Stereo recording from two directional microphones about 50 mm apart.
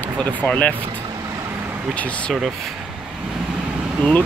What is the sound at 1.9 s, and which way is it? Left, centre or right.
Speech, left.